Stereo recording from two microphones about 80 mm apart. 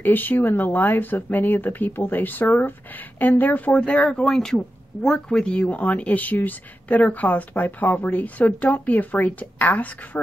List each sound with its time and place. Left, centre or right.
0.0 s speech: left